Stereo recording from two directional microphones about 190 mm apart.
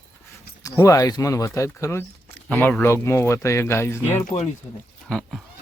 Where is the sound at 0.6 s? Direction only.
15° left (ahead or behind).